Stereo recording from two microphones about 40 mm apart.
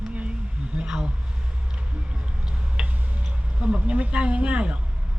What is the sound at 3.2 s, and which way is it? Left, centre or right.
Speech, right.